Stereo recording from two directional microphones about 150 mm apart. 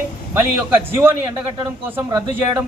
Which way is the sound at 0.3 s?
15° right (ahead or behind).